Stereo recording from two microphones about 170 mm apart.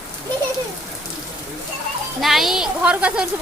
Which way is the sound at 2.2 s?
Centre (ahead or behind).